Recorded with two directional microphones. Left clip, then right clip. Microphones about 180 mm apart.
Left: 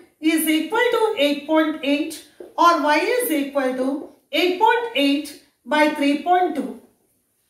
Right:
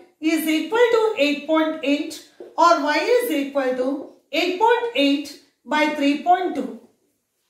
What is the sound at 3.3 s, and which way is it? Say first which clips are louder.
A woman's voice: even; 15° right (ahead or behind).